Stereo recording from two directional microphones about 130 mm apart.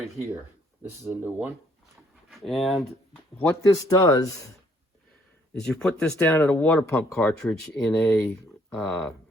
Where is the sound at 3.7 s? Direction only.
30° left (ahead or behind).